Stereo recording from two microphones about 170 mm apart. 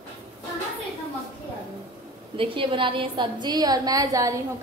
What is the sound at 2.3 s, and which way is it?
A woman's voice, 30° right (ahead or behind).